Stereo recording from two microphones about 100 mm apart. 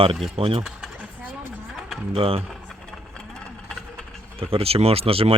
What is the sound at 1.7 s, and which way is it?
Mechanisms, 5° right (ahead or behind).